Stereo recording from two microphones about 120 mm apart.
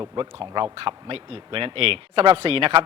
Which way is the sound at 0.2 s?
40° right (ahead or behind).